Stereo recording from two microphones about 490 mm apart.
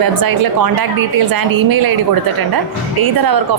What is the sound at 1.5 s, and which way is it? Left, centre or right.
Speech, right.